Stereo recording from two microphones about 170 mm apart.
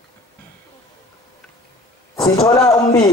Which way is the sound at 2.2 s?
30° left (ahead or behind).